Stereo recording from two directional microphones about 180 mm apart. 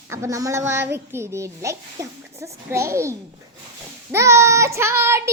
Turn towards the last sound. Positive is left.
turn(degrees=-15)  # may be behind; listen again after turning